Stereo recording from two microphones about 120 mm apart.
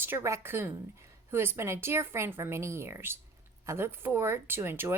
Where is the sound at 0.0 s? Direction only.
20° right (ahead or behind).